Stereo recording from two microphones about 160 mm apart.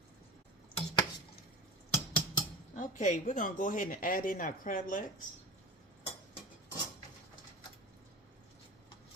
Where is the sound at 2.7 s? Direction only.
50° left (ahead or behind).